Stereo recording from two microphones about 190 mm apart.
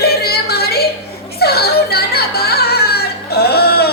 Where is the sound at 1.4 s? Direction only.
55° left (ahead or behind).